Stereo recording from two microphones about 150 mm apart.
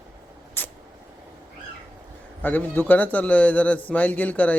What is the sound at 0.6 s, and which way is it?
Vehicle, 15° left (ahead or behind).